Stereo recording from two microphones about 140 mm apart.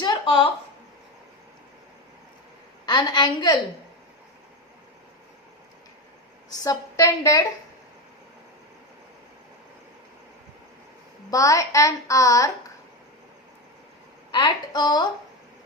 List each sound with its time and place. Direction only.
0.0 s a sound: 35° left (ahead or behind)
2.8 s a woman's voice: 30° left (ahead or behind)
6.5 s a woman's voice: 25° left (ahead or behind)
11.3 s a woman's voice: 25° left (ahead or behind)
14.3 s a woman's voice: 35° left (ahead or behind)